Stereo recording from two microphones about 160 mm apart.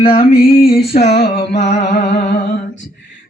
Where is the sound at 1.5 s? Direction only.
45° left (ahead or behind).